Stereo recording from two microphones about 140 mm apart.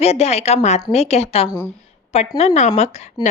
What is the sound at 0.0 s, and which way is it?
Speech, 50° left (ahead or behind).